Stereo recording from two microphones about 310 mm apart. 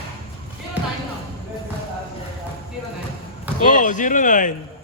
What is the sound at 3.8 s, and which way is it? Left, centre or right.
Speech, left.